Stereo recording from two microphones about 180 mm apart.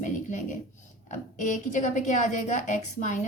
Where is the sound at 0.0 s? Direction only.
45° left (ahead or behind).